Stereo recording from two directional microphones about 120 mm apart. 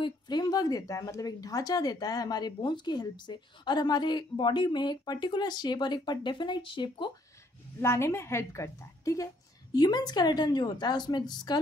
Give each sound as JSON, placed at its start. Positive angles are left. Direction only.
{"t": 0.0, "sound": "speech", "side_deg": 35}
{"t": 7.8, "sound": "a woman's voice", "side_deg": 20}